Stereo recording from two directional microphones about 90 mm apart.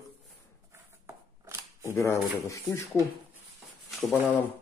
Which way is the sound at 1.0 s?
30° right (ahead or behind).